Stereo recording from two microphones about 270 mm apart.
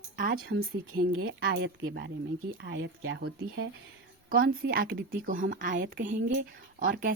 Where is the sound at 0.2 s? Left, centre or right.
Right.